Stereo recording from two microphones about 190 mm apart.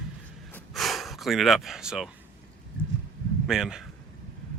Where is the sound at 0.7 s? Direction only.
Centre (ahead or behind).